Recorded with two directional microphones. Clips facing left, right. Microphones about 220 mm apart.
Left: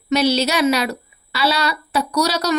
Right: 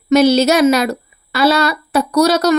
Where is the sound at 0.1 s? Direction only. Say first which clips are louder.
Right 7 dB; 45° right (ahead or behind).